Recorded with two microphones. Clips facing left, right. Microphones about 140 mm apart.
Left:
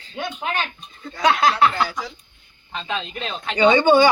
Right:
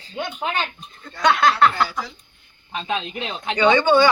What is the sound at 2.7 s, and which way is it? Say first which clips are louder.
Speech: right 2 dB; 15° right (ahead or behind).